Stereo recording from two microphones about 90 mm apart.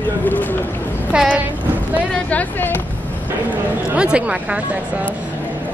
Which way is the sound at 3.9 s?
10° right (ahead or behind).